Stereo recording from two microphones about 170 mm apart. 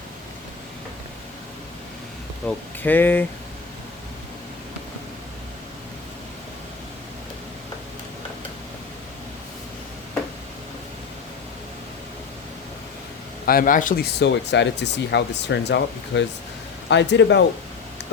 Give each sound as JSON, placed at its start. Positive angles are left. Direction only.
{"t": 2.5, "sound": "speech", "side_deg": 10}
{"t": 13.4, "sound": "speech", "side_deg": 60}